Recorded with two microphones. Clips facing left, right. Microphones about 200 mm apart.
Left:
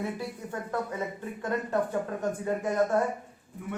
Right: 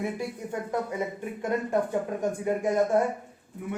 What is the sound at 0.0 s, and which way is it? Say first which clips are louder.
Speech: right 2 dB; 15° right (ahead or behind).